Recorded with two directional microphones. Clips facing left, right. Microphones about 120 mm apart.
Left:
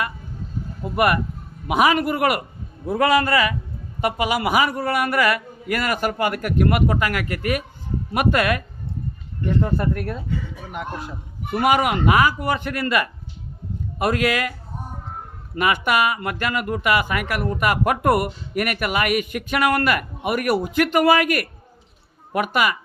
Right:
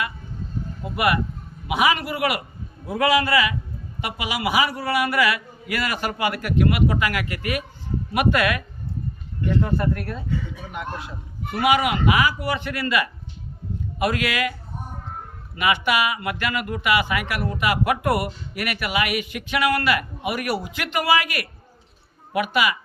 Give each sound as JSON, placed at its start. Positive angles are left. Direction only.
{"t": 0.9, "sound": "speech", "side_deg": 45}
{"t": 15.5, "sound": "speech", "side_deg": 45}